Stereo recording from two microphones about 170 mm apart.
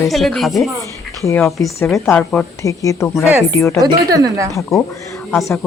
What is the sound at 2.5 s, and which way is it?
A woman's voice, 20° left (ahead or behind).